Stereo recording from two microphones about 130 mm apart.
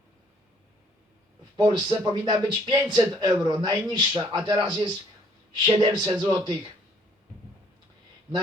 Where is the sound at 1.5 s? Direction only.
35° right (ahead or behind).